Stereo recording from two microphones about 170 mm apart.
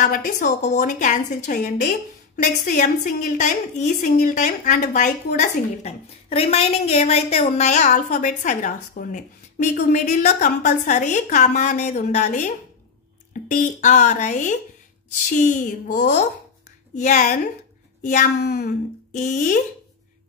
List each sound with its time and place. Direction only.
0.0 s a woman's voice: 50° left (ahead or behind)